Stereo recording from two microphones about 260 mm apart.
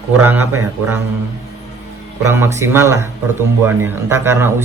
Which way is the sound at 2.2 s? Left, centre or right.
Centre.